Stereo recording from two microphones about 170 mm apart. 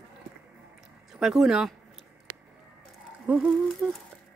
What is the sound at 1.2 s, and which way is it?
Speech, centre (ahead or behind).